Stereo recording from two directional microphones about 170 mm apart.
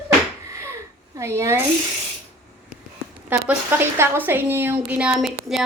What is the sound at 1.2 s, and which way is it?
Speech, 15° right (ahead or behind).